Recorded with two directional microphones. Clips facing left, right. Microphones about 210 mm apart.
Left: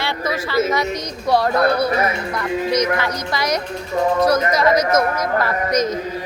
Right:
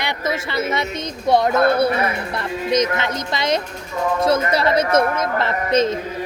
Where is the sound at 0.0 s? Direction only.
20° right (ahead or behind).